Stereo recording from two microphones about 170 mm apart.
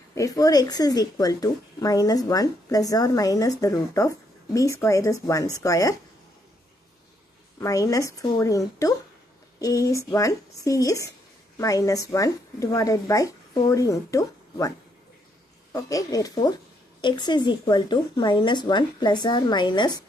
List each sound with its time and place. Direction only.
0.1 s speech: 20° left (ahead or behind)
7.6 s speech: 20° left (ahead or behind)
15.7 s speech: 20° left (ahead or behind)